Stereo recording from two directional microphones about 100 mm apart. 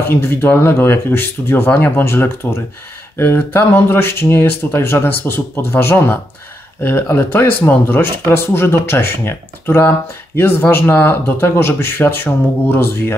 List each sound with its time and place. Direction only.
0.0 s speech: 25° left (ahead or behind)